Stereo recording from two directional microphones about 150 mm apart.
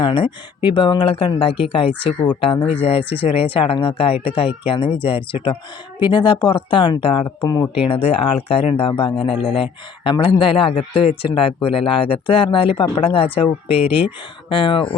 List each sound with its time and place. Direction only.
0.0 s speech: 30° left (ahead or behind)
7.9 s speech: 40° left (ahead or behind)